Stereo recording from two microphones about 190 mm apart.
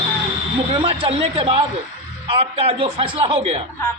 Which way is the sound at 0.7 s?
25° right (ahead or behind).